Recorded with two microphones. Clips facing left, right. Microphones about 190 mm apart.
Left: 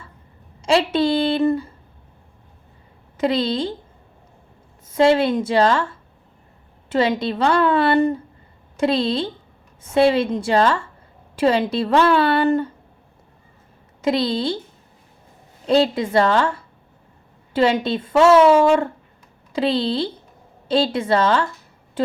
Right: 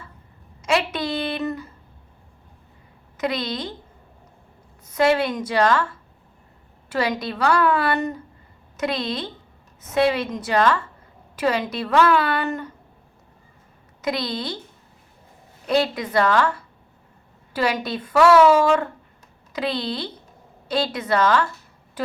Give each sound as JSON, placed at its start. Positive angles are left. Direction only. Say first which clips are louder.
{"t": 0.6, "sound": "a woman's voice", "louder": "left 6 dB", "side_deg": 30}
{"t": 3.2, "sound": "a woman's voice", "louder": "left 6 dB", "side_deg": 30}
{"t": 4.9, "sound": "a woman's voice", "louder": "left 4 dB", "side_deg": 25}
{"t": 14.0, "sound": "a woman's voice", "louder": "left 6 dB", "side_deg": 30}
{"t": 15.6, "sound": "a woman's voice", "louder": "left 4 dB", "side_deg": 25}
{"t": 22.0, "sound": "a sound", "louder": "left 7 dB", "side_deg": 25}